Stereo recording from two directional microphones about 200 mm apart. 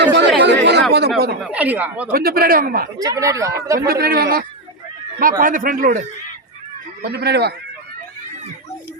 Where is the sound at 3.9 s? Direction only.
50° right (ahead or behind).